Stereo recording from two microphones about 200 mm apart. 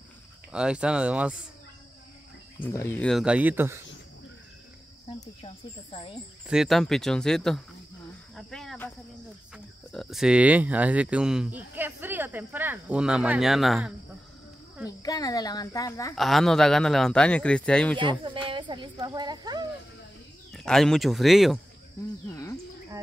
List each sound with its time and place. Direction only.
0.5 s a man's voice: 5° right (ahead or behind)
2.6 s a man's voice: 10° left (ahead or behind); by 3.8 s 10° right (ahead or behind)
5.4 s speech: 25° left (ahead or behind)
6.4 s a man's voice: centre (ahead or behind)
9.9 s speech: centre (ahead or behind)
14.9 s a child's voice: 20° left (ahead or behind)
16.2 s a man's voice: centre (ahead or behind)
17.9 s a woman's voice: 25° right (ahead or behind)
20.5 s a man's voice: centre (ahead or behind)
22.3 s a sound: 15° left (ahead or behind)